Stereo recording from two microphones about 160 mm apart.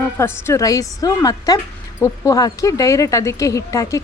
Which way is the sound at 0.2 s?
15° left (ahead or behind).